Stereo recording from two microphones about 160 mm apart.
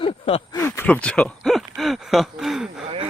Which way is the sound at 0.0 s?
35° left (ahead or behind).